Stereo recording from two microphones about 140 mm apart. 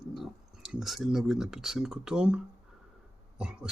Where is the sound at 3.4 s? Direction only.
5° right (ahead or behind).